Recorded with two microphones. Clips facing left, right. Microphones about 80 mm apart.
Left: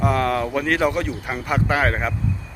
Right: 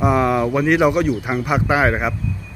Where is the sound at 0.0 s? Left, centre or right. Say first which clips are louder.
Right 4 dB; centre.